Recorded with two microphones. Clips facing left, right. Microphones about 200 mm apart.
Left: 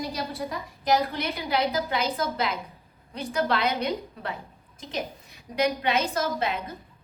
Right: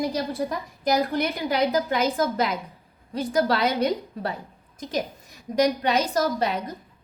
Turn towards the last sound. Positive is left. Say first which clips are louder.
# right 4 dB
turn(degrees=-40)  # may be behind; listen again after turning